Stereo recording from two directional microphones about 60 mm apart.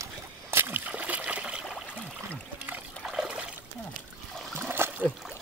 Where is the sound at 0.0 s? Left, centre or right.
Right.